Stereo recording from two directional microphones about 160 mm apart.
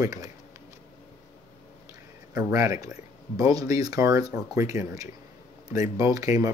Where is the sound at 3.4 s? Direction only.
20° right (ahead or behind).